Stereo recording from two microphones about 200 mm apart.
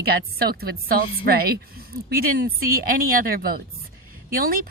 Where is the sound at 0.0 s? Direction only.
50° right (ahead or behind).